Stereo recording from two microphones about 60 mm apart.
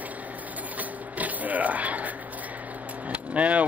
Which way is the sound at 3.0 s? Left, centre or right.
Right.